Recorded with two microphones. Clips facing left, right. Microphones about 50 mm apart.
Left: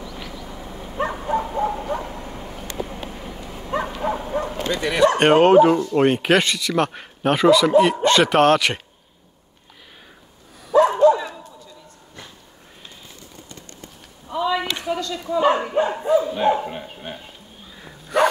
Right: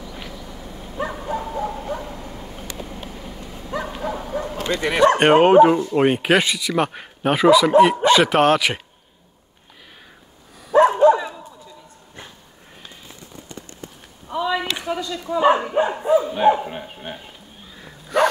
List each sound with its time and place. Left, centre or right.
0.0 s vehicle: centre
0.3 s bow-wow: centre
2.0 s vehicle: left
3.1 s dog: left
4.2 s bow-wow: left
4.6 s speech: right
5.2 s speech: centre
10.9 s bow-wow: right
11.1 s chop: centre
14.2 s a sound: centre
15.2 s speech: centre
18.1 s dog: centre